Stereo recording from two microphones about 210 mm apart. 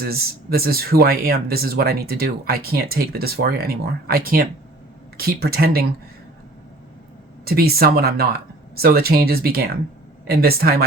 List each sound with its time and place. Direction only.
0.0 s speech: 45° right (ahead or behind)
7.4 s speech: 45° right (ahead or behind)